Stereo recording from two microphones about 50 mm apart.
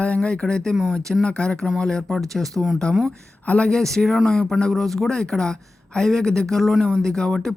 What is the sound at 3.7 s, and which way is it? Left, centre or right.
Speech, centre.